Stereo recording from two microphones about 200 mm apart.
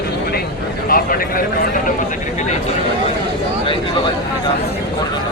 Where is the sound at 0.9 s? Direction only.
45° left (ahead or behind).